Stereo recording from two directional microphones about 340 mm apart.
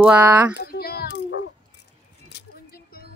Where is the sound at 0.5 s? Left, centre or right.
Left.